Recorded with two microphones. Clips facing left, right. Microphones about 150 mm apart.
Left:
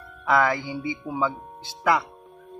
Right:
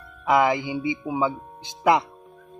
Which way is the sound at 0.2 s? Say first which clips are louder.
Right 2 dB; 15° right (ahead or behind).